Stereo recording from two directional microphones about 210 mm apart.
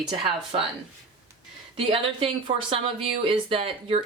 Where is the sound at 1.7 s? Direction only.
25° right (ahead or behind).